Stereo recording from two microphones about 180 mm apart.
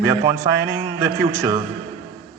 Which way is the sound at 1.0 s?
20° right (ahead or behind).